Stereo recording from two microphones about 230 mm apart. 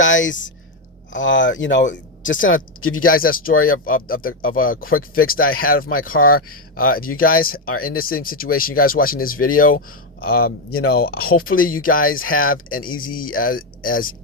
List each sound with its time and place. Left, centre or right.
0.0 s speech: left
3.2 s speech: left
7.7 s speech: left
7.9 s speech: left